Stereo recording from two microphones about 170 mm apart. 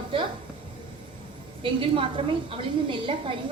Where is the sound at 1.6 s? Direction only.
30° right (ahead or behind).